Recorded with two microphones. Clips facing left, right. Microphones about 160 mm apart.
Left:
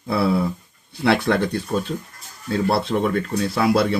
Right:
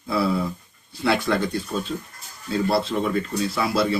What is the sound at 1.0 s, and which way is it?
A man's voice, 65° left (ahead or behind).